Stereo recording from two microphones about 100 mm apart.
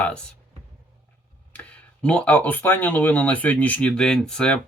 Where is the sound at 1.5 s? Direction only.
10° left (ahead or behind).